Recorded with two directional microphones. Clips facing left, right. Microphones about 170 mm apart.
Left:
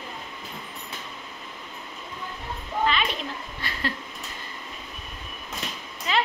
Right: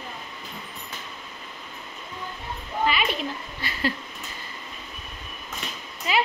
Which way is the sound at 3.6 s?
5° right (ahead or behind).